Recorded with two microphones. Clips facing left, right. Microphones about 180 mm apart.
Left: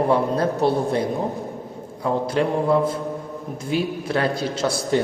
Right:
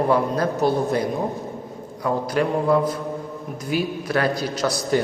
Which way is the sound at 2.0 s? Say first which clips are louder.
Left 1 dB; 25° left (ahead or behind).